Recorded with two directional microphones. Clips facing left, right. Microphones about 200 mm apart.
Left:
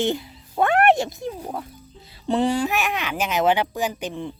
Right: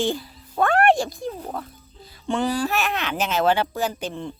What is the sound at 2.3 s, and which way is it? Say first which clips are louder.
Speech: left 2 dB; 30° left (ahead or behind).